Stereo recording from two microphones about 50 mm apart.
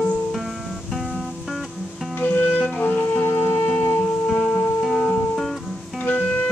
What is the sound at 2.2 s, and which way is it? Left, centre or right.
Music, left.